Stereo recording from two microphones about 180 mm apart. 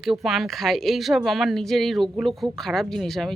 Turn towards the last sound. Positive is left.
turn(degrees=0)  # may be behind; listen again after turning